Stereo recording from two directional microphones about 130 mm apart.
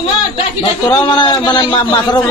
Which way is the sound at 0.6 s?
35° left (ahead or behind).